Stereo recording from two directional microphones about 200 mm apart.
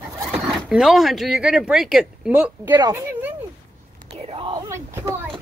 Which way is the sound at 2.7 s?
20° right (ahead or behind).